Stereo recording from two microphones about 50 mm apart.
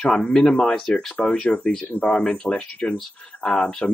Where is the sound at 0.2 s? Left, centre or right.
Centre.